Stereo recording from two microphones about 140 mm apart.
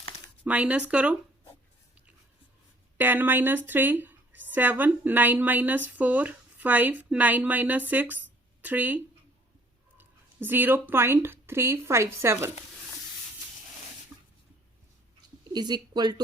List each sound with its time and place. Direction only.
0.4 s a woman's voice: 10° right (ahead or behind)
3.0 s a woman's voice: 15° right (ahead or behind)
10.0 s speech: 15° right (ahead or behind)
15.5 s speech: 30° right (ahead or behind)